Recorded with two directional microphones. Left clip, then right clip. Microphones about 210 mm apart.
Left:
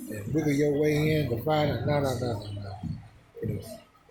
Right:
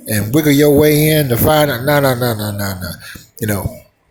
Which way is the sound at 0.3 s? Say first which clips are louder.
Right 15 dB; 50° right (ahead or behind).